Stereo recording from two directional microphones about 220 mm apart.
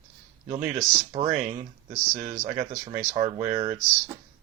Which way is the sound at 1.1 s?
25° right (ahead or behind).